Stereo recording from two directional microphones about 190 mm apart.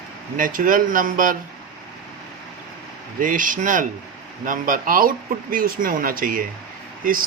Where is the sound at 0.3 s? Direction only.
45° right (ahead or behind).